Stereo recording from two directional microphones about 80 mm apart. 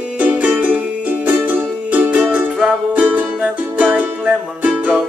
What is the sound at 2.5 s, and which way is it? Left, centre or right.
Music, centre.